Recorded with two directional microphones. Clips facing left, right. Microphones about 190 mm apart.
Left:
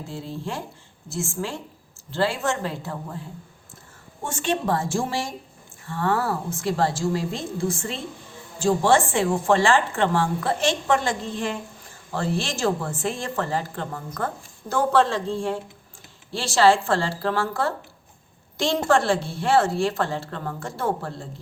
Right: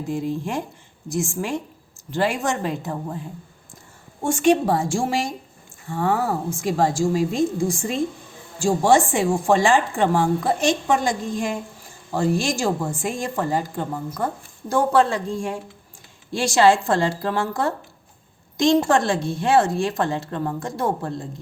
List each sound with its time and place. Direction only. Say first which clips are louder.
0.1 s speech: right 7 dB; 15° right (ahead or behind)